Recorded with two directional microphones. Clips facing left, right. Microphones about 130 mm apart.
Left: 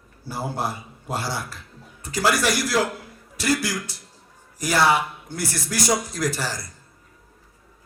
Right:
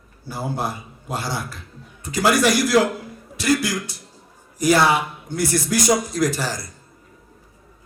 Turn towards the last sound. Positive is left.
turn(degrees=-20)  # may be behind; listen again after turning